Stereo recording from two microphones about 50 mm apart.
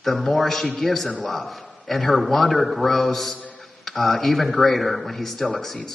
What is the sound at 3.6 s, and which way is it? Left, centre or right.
Speech, centre.